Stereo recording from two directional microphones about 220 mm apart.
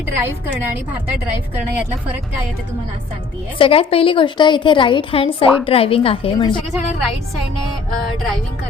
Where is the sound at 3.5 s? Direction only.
25° left (ahead or behind).